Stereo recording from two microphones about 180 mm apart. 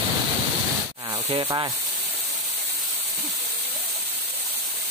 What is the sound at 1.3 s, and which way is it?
Speech, 25° right (ahead or behind).